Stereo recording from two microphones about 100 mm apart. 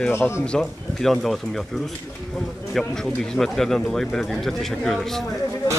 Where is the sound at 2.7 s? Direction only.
5° left (ahead or behind).